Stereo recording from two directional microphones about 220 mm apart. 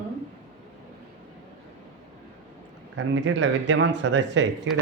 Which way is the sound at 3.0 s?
55° right (ahead or behind).